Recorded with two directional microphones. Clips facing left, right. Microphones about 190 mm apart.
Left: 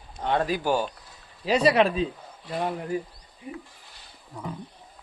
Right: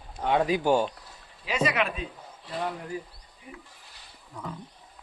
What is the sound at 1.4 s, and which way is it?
Speech, 35° left (ahead or behind).